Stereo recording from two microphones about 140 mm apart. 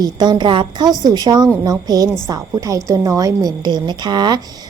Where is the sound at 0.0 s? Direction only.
30° right (ahead or behind).